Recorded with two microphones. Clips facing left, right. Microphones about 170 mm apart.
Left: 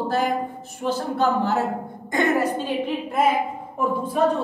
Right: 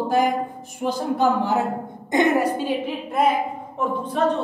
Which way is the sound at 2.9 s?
Centre (ahead or behind).